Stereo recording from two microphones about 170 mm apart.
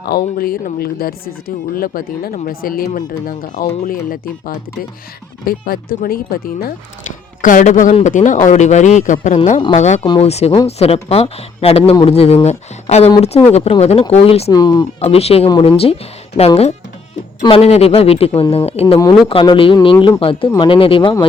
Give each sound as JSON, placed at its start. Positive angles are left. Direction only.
{"t": 0.0, "sound": "a man's voice", "side_deg": 65}
{"t": 7.4, "sound": "a man's voice", "side_deg": 50}
{"t": 14.5, "sound": "speech", "side_deg": 25}
{"t": 15.0, "sound": "speech", "side_deg": 35}